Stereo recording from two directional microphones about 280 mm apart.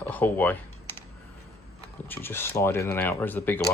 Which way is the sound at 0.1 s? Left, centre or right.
Centre.